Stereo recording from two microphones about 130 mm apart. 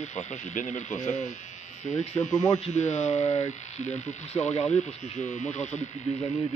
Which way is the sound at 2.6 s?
60° left (ahead or behind).